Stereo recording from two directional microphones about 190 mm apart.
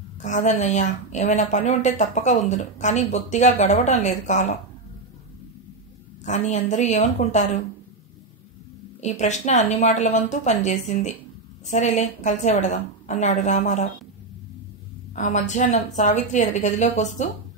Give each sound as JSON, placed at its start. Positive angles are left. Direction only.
{"t": 0.2, "sound": "a woman's voice", "side_deg": 40}
{"t": 6.2, "sound": "a woman's voice", "side_deg": 40}
{"t": 9.0, "sound": "a woman's voice", "side_deg": 35}
{"t": 15.1, "sound": "a woman's voice", "side_deg": 40}